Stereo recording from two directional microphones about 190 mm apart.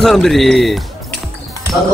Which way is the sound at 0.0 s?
Centre (ahead or behind).